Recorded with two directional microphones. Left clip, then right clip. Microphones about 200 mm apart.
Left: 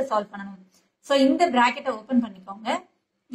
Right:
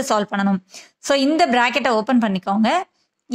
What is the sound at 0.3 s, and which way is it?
A woman's voice, 40° right (ahead or behind).